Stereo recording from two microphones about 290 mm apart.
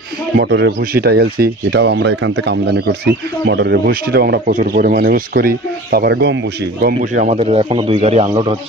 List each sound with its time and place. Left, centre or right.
0.4 s speech: right; by 8.5 s centre